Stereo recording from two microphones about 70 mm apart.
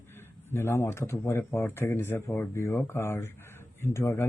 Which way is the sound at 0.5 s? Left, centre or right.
Left.